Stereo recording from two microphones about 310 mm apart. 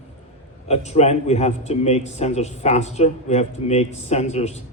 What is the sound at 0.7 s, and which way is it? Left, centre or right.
A man's voice, left.